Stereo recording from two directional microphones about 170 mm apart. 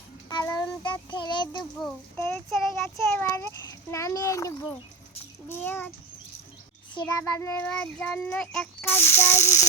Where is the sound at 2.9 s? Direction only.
15° left (ahead or behind).